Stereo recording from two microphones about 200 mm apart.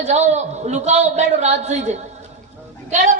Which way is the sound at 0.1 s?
35° right (ahead or behind).